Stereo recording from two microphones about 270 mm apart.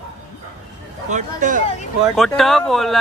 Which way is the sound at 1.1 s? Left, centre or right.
Right.